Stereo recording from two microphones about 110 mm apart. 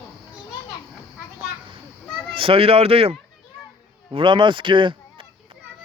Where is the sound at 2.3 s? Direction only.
55° right (ahead or behind).